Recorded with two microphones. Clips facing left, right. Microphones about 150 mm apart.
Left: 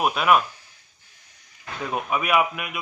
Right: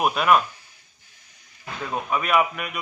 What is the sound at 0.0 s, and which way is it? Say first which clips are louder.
Speech: even; centre (ahead or behind).